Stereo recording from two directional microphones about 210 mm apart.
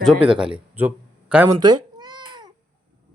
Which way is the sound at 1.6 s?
20° right (ahead or behind).